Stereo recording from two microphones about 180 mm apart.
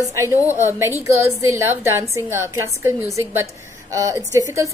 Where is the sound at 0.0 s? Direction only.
15° right (ahead or behind).